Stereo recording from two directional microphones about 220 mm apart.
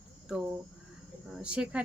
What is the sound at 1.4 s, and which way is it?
Speech, 5° right (ahead or behind).